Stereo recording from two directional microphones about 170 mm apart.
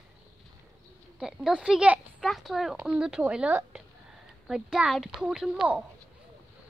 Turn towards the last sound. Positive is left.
turn(degrees=-5)  # may be behind; listen again after turning